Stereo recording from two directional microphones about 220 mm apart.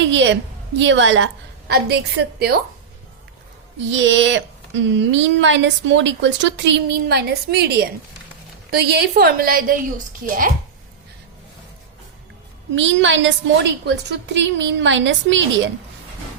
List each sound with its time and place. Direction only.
0.1 s a woman's voice: 55° right (ahead or behind)
3.9 s a woman's voice: 55° right (ahead or behind); by 10.5 s 40° right (ahead or behind)
12.7 s speech: 55° right (ahead or behind)